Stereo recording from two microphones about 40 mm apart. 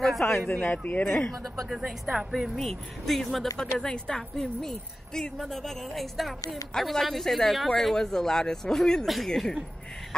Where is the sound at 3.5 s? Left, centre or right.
Centre.